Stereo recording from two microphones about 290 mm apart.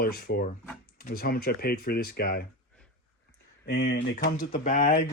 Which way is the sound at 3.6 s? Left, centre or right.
Left.